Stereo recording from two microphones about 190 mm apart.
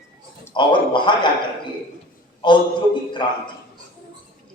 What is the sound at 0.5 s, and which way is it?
Speech, 25° left (ahead or behind).